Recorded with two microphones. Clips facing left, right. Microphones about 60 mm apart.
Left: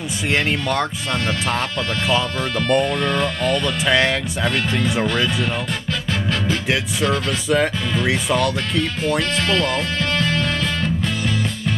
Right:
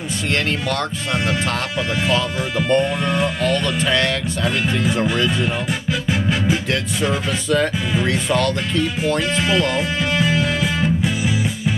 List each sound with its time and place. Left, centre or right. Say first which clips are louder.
0.3 s speech: left 1 dB; centre
2.5 s speech: right 1 dB; centre
4.5 s speech: right 1 dB; centre
6.0 s music: right 2 dB; centre
7.4 s speech: even; centre
9.4 s music: right 1 dB; centre